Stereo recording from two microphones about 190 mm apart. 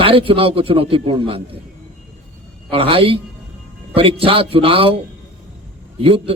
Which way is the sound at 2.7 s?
30° right (ahead or behind).